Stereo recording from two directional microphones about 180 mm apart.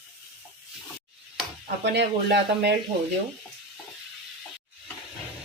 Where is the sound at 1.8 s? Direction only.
70° right (ahead or behind).